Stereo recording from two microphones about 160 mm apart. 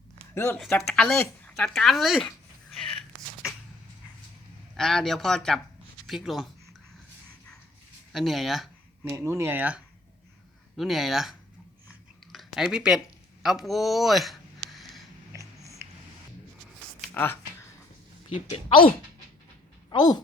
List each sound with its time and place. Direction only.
0.5 s speech: centre (ahead or behind)
2.6 s a sound: 5° left (ahead or behind)
4.8 s speech: 5° left (ahead or behind)
8.1 s speech: centre (ahead or behind)
9.0 s speech: 15° right (ahead or behind)
12.3 s a sound: centre (ahead or behind)
15.3 s a sound: 20° right (ahead or behind)
18.3 s speech: 35° left (ahead or behind)
19.9 s a woman's voice: 25° left (ahead or behind)